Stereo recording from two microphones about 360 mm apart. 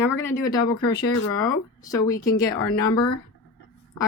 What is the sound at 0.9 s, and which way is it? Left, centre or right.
Speech, left.